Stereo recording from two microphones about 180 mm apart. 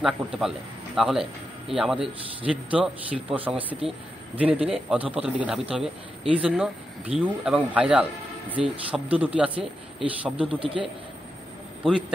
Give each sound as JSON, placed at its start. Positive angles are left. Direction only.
{"t": 0.0, "sound": "a man's voice", "side_deg": 0}